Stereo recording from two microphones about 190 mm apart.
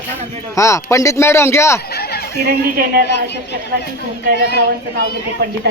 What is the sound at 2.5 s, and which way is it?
Speech, 50° right (ahead or behind).